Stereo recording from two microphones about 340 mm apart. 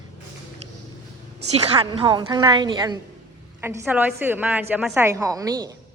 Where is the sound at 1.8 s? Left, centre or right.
Centre.